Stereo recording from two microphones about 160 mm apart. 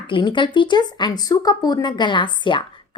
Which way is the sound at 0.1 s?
30° left (ahead or behind).